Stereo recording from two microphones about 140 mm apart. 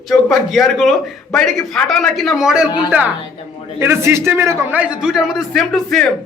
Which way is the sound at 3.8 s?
20° right (ahead or behind).